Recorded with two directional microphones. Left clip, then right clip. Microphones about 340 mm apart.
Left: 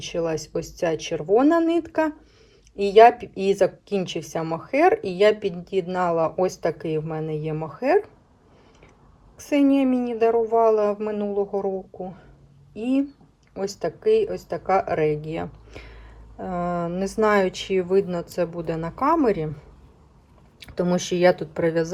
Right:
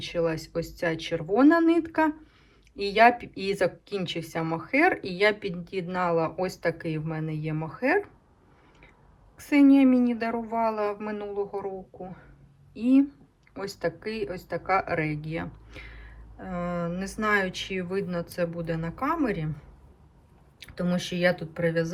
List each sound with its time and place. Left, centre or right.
0.0 s speech: centre
9.4 s speech: centre
13.5 s speech: centre
20.6 s speech: centre